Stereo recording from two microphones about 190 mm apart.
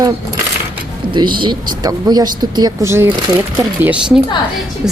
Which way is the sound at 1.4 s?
20° right (ahead or behind).